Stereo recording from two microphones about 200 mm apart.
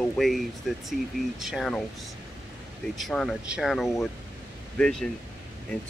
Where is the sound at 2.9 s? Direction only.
Centre (ahead or behind).